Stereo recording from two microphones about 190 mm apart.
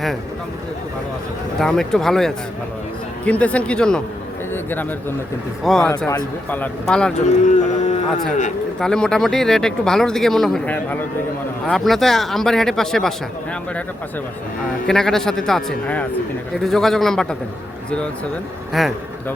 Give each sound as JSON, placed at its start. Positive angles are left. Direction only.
{"t": 1.5, "sound": "a man's voice", "side_deg": 5}
{"t": 7.4, "sound": "cattle", "side_deg": 40}
{"t": 8.8, "sound": "speech", "side_deg": 5}
{"t": 14.8, "sound": "speech", "side_deg": 0}
{"t": 18.7, "sound": "speech", "side_deg": 0}